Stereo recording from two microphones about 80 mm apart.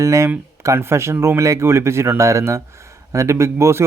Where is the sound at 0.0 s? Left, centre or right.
Right.